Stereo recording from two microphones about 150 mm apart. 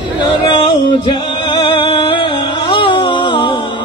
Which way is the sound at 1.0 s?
30° left (ahead or behind).